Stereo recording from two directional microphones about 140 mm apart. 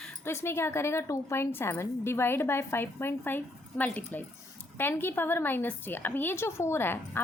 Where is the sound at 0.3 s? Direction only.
15° left (ahead or behind).